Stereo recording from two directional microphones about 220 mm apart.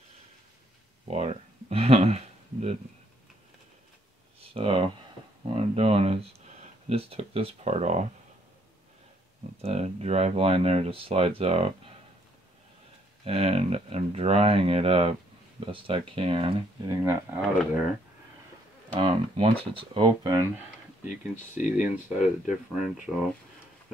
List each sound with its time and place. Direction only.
1.1 s a sound: 30° right (ahead or behind)
4.4 s a sound: 25° right (ahead or behind)
9.6 s speech: 30° right (ahead or behind)
13.2 s speech: 25° right (ahead or behind)
17.0 s speech: 10° right (ahead or behind)
18.9 s speech: 25° right (ahead or behind)
21.0 s speech: 35° left (ahead or behind)